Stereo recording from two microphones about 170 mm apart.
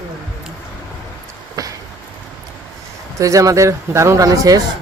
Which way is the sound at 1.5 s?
20° right (ahead or behind).